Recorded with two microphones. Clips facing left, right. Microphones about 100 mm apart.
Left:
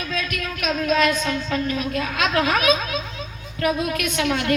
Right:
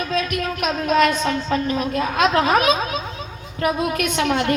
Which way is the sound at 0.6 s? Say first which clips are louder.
Right 2 dB; 25° right (ahead or behind).